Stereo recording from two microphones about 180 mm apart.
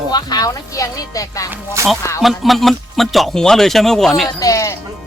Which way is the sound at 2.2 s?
Centre (ahead or behind).